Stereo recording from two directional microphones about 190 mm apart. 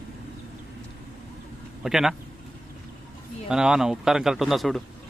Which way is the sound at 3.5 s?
5° right (ahead or behind).